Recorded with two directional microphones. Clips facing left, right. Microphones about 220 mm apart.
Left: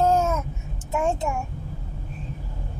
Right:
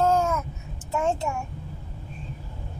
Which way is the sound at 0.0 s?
20° left (ahead or behind).